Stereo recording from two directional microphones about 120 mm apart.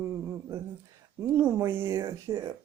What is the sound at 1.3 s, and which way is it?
Speech, 20° right (ahead or behind).